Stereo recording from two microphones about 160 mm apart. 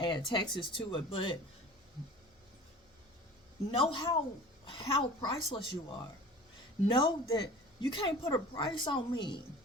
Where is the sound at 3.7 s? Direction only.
35° left (ahead or behind).